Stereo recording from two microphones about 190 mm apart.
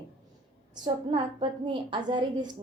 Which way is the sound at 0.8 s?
25° right (ahead or behind).